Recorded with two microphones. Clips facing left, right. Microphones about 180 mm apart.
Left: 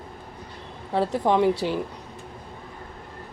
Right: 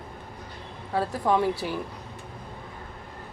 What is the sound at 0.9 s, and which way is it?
Speech, 25° left (ahead or behind).